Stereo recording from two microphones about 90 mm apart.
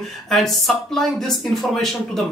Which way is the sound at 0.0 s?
5° left (ahead or behind).